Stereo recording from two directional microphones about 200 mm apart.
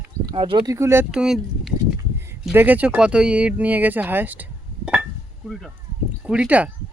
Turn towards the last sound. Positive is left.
turn(degrees=-5)  # may be behind; listen again after turning